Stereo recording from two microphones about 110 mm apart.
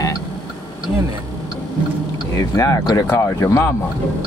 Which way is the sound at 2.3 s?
30° left (ahead or behind).